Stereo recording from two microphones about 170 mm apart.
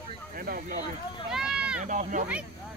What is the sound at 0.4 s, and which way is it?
Speech, 60° right (ahead or behind).